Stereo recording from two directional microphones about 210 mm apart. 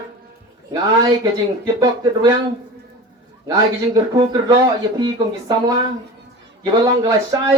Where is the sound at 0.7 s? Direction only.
20° right (ahead or behind).